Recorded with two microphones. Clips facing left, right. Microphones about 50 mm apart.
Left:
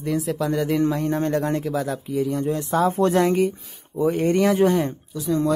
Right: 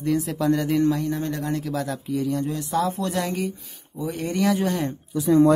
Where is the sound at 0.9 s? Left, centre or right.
Left.